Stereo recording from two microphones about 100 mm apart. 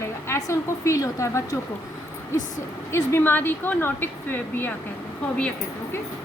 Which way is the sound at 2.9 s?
25° left (ahead or behind).